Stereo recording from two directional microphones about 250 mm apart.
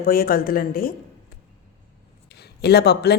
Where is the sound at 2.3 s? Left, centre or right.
Left.